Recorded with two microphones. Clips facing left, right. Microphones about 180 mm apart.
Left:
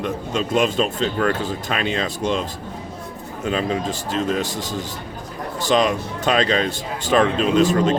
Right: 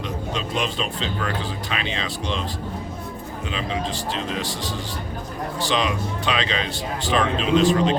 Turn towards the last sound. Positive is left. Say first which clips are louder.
# left 1 dB
turn(degrees=45)  # may be behind; listen again after turning